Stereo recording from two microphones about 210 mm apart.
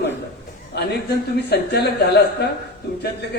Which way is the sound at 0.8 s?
50° left (ahead or behind).